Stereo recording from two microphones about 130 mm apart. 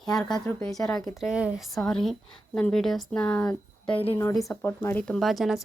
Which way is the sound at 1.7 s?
5° left (ahead or behind).